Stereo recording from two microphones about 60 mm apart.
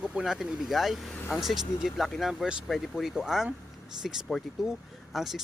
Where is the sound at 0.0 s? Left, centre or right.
Centre.